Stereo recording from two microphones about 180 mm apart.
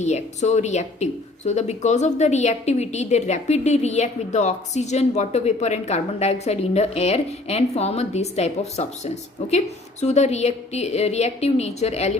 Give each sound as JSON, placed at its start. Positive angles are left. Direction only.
{"t": 0.0, "sound": "a woman's voice", "side_deg": 40}